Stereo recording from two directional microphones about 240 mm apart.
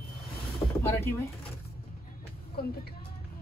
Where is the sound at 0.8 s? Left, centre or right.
Centre.